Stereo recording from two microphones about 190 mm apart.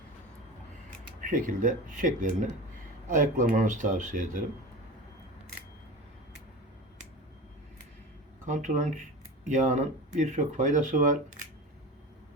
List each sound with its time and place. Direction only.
1.2 s speech: 45° right (ahead or behind)
8.4 s speech: 40° right (ahead or behind)